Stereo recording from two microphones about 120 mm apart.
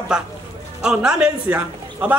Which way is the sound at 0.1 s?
5° right (ahead or behind).